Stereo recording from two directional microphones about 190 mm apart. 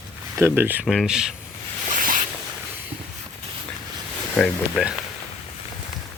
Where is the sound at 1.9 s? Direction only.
45° right (ahead or behind).